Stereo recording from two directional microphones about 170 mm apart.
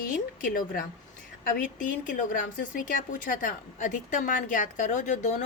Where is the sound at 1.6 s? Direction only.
50° left (ahead or behind).